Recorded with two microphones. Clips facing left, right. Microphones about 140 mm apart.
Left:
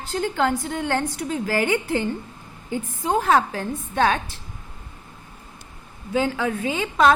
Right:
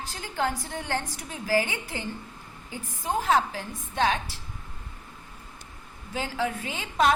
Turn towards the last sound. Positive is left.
turn(degrees=80)